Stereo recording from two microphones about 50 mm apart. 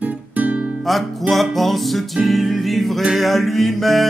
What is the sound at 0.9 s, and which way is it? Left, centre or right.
Music, centre.